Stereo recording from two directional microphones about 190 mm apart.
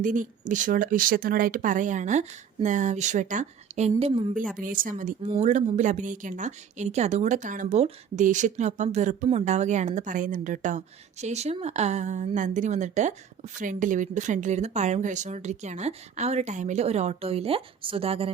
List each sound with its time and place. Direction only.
0.0 s a woman's voice: 40° right (ahead or behind)
4.6 s a woman's voice: 45° right (ahead or behind); by 18.3 s 30° right (ahead or behind)